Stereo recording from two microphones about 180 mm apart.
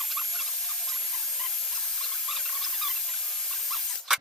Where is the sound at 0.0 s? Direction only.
Centre (ahead or behind).